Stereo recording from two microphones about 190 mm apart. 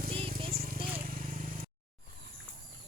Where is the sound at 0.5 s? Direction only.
50° right (ahead or behind).